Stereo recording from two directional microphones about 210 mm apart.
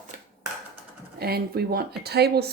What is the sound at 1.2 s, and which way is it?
Speech, 50° right (ahead or behind).